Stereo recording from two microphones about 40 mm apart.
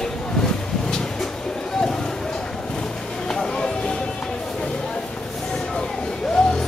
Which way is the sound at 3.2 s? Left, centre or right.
Centre.